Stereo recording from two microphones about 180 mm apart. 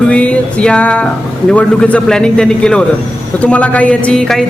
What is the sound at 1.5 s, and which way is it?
Speech, 5° left (ahead or behind).